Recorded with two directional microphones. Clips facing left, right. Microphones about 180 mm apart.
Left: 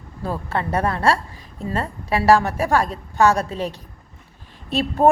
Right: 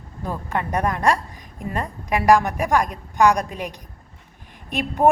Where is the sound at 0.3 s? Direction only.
15° right (ahead or behind).